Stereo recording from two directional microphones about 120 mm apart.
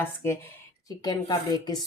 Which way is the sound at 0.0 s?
20° left (ahead or behind).